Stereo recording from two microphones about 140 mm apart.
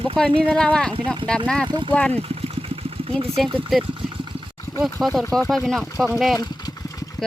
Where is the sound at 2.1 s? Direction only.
45° right (ahead or behind).